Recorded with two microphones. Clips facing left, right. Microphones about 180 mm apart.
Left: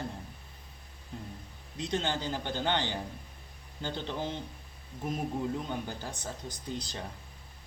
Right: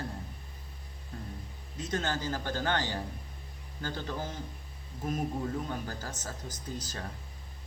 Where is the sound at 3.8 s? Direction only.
20° left (ahead or behind).